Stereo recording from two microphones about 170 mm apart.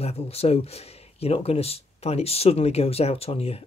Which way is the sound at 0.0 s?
35° left (ahead or behind).